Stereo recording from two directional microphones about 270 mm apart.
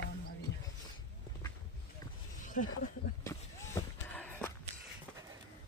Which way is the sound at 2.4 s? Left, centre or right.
Left.